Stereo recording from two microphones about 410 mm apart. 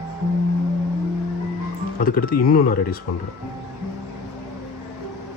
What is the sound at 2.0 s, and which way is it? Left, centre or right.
Speech, left.